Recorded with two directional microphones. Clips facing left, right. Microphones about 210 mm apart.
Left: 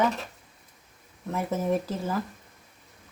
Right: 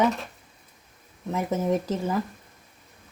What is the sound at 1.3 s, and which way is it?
Speech, 20° right (ahead or behind).